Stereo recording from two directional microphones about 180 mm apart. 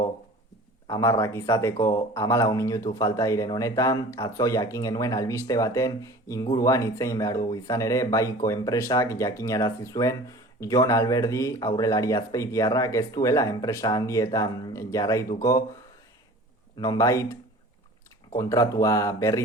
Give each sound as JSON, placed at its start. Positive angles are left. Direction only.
{"t": 0.9, "sound": "speech", "side_deg": 15}
{"t": 16.7, "sound": "speech", "side_deg": 20}
{"t": 18.3, "sound": "speech", "side_deg": 20}